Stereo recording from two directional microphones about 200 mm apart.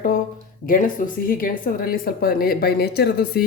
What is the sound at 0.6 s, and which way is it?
Speech, 45° left (ahead or behind).